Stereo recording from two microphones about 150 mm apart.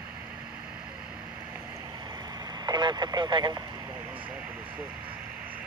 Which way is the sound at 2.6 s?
30° right (ahead or behind).